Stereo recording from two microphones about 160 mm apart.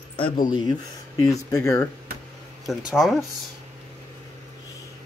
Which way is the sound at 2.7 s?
5° right (ahead or behind).